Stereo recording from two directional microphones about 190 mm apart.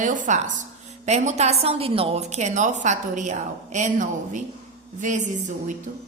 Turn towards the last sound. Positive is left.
turn(degrees=-40)  # may be behind; listen again after turning